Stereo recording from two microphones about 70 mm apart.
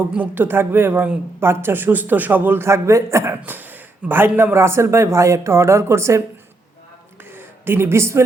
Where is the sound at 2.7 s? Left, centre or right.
Right.